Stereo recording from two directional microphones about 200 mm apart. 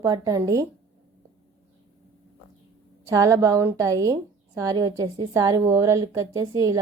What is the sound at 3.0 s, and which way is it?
A woman's voice, 15° right (ahead or behind).